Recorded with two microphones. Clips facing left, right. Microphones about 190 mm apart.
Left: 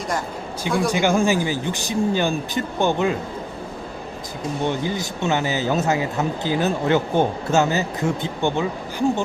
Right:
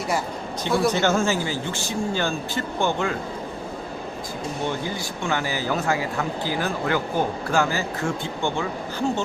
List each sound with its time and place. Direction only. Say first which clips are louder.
0.9 s speech: left 4 dB; 10° left (ahead or behind)
4.8 s speech: left 4 dB; 20° left (ahead or behind)